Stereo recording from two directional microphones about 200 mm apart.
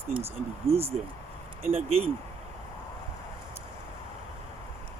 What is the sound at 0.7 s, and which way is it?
Speech, 30° right (ahead or behind).